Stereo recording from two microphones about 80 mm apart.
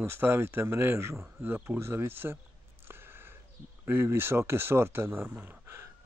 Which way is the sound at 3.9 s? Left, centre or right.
Right.